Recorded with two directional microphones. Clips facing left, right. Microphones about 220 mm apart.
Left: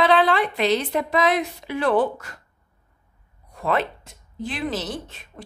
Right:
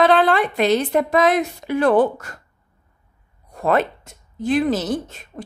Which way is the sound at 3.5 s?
45° right (ahead or behind).